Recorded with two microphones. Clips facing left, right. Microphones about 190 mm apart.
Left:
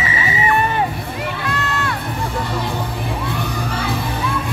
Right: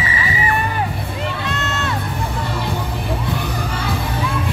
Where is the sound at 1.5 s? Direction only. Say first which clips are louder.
Left 1 dB; 25° right (ahead or behind).